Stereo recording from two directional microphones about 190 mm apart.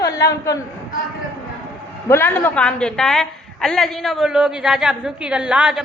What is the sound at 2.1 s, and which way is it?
A woman's voice, 10° left (ahead or behind).